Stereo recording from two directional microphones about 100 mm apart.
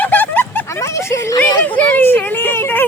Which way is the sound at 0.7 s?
30° left (ahead or behind).